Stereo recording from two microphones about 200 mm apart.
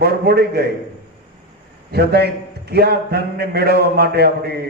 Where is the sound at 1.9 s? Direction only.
55° right (ahead or behind).